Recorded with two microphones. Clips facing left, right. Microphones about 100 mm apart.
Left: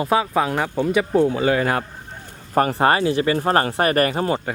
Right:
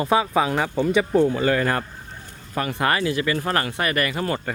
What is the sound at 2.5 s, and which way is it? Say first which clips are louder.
Speech: left 6 dB; 40° left (ahead or behind).